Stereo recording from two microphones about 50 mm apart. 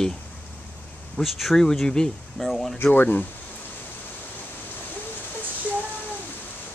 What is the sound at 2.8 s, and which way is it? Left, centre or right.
Speech, left.